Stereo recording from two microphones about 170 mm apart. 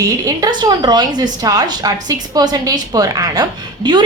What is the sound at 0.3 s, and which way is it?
A woman's voice, 20° right (ahead or behind).